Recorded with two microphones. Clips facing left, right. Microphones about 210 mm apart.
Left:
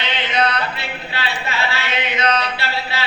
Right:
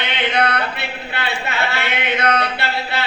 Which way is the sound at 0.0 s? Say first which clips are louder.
Right 1 dB; 55° right (ahead or behind).